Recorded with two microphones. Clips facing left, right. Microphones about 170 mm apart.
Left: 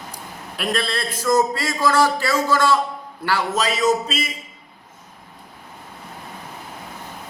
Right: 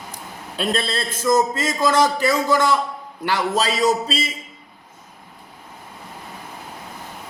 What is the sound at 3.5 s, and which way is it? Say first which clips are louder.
Speech: even; 30° right (ahead or behind).